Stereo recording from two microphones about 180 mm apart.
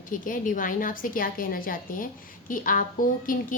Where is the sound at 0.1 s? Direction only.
50° left (ahead or behind).